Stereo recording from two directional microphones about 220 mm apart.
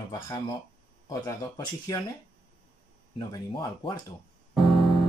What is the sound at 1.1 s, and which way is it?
Speech, 15° left (ahead or behind).